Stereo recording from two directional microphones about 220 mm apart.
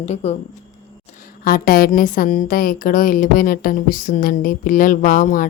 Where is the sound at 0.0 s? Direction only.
30° left (ahead or behind).